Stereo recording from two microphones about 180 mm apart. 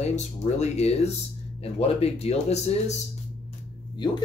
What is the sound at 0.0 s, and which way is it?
Speech, 40° left (ahead or behind).